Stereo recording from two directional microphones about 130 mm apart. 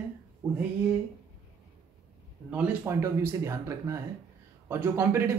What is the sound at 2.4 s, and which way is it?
Speech, 10° right (ahead or behind).